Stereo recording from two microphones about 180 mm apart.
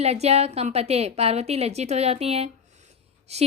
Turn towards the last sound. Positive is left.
turn(degrees=-35)  # may be behind; listen again after turning